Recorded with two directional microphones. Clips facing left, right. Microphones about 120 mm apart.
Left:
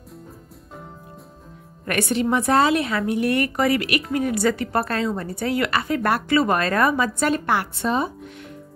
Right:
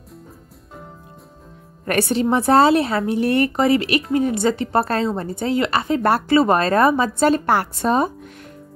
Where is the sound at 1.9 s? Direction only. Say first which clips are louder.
Right 3 dB; 30° right (ahead or behind).